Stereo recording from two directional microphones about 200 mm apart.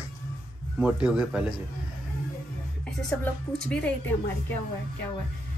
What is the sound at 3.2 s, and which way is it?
Speech, 5° left (ahead or behind).